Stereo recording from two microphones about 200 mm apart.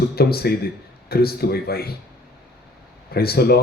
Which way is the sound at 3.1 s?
50° left (ahead or behind).